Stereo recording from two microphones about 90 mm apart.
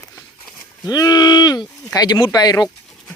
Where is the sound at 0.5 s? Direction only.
45° left (ahead or behind).